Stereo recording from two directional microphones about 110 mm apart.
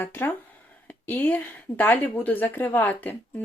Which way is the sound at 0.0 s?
20° left (ahead or behind).